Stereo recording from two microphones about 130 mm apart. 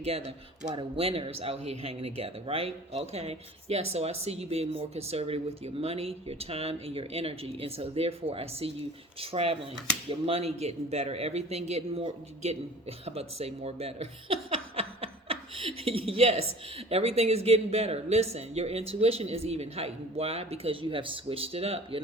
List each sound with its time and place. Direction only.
0.0 s a man's voice: 50° right (ahead or behind)
14.8 s chuckle: 50° right (ahead or behind)
16.7 s speech: 50° right (ahead or behind)